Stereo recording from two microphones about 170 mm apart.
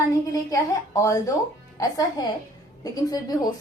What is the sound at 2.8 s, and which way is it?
Speech, 20° left (ahead or behind).